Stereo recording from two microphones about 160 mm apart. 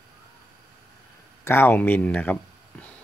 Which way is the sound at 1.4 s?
15° left (ahead or behind).